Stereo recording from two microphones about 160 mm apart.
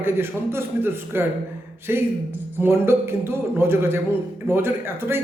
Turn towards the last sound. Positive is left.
turn(degrees=-15)  # may be behind; listen again after turning